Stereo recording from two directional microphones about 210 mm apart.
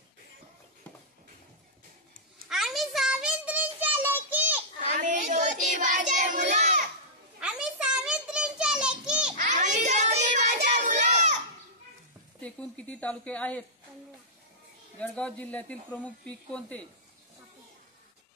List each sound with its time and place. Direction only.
2.5 s child singing: centre (ahead or behind)
5.0 s child singing: 35° right (ahead or behind)
7.3 s a sound: 5° right (ahead or behind)
9.6 s child singing: 35° right (ahead or behind)
12.4 s speech: 5° left (ahead or behind)
15.0 s speech: 5° left (ahead or behind)